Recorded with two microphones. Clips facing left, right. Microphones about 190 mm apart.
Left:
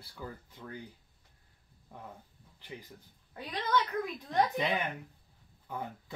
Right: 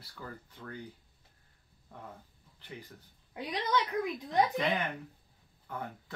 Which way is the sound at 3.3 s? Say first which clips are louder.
Even; 15° right (ahead or behind).